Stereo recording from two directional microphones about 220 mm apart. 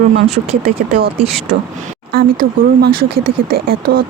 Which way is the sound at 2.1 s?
45° right (ahead or behind).